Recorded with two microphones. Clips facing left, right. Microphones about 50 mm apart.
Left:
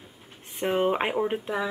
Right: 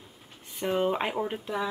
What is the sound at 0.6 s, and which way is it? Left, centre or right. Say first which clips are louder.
Speech: left 3 dB; left.